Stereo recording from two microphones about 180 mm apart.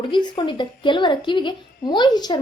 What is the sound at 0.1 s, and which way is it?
Speech, 25° left (ahead or behind).